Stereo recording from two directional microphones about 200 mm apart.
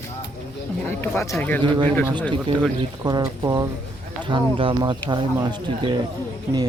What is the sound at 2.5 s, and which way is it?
Speech, 25° right (ahead or behind).